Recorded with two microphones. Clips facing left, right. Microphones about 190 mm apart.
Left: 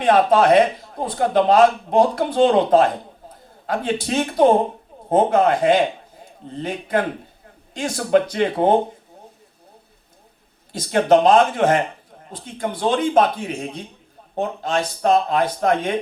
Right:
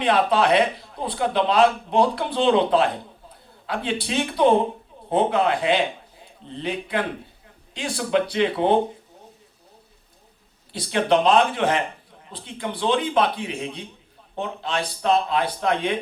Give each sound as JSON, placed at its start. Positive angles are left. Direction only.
{"t": 0.0, "sound": "a man's voice", "side_deg": 45}
{"t": 10.7, "sound": "a man's voice", "side_deg": 45}